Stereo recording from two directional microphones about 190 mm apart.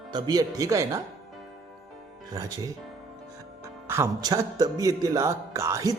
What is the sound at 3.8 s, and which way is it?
Speech, 15° right (ahead or behind).